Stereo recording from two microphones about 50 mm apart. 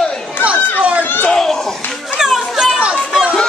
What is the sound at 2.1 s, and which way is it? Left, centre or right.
Children playing, centre.